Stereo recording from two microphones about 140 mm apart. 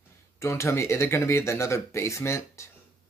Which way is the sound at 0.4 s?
20° left (ahead or behind).